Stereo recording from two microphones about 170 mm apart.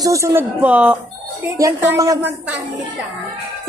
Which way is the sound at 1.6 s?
20° right (ahead or behind).